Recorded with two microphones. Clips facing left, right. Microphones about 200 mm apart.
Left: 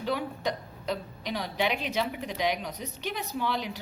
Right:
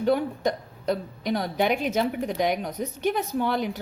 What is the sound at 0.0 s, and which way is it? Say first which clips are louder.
Speech: right 7 dB; 50° right (ahead or behind).